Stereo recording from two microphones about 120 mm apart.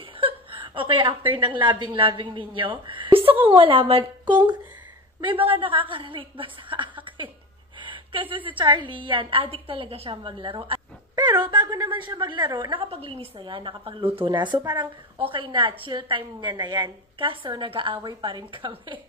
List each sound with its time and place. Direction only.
0.2 s a sound: 45° right (ahead or behind)
1.6 s a woman's voice: 45° right (ahead or behind)
12.8 s a woman's voice: 50° right (ahead or behind)